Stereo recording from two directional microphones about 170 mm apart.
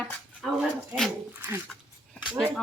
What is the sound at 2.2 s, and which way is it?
Dog, 5° right (ahead or behind).